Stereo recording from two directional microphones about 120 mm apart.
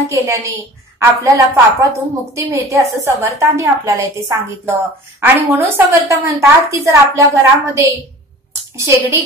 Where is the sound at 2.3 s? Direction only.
25° right (ahead or behind).